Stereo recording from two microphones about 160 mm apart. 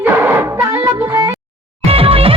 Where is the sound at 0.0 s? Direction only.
15° right (ahead or behind).